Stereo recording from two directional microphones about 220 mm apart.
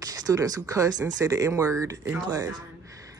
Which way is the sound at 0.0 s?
15° right (ahead or behind).